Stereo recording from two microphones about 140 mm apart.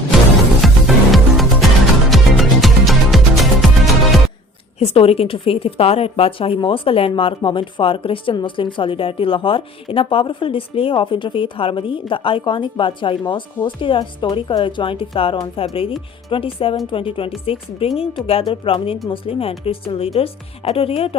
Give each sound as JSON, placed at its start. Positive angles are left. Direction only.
{"t": 0.6, "sound": "music", "side_deg": 0}
{"t": 4.8, "sound": "a woman's voice", "side_deg": 45}